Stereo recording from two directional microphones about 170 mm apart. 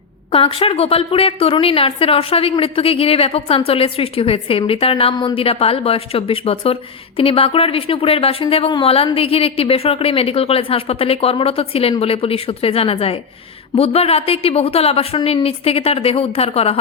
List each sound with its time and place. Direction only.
0.3 s a woman's voice: 35° left (ahead or behind)